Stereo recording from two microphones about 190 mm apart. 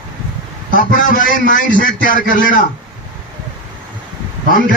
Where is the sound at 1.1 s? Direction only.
45° left (ahead or behind).